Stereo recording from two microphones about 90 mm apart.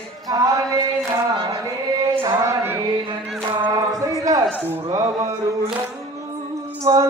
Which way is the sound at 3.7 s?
40° right (ahead or behind).